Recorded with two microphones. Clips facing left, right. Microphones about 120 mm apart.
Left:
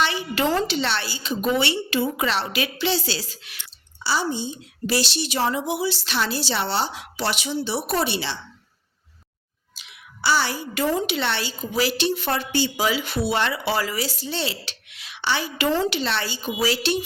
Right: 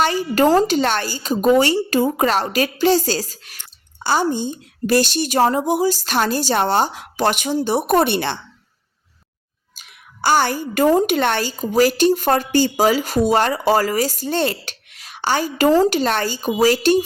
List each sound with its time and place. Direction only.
0.0 s a woman's voice: 45° right (ahead or behind)
9.7 s a woman's voice: 45° right (ahead or behind)